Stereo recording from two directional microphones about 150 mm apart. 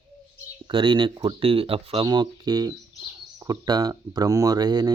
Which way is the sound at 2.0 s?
30° right (ahead or behind).